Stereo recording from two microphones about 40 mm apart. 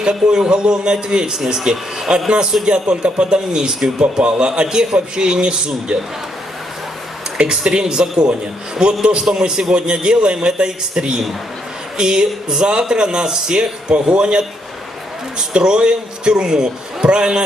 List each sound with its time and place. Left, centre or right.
0.0 s a man's voice: right
4.2 s a man's voice: right
7.6 s a man's voice: centre
15.5 s a man's voice: right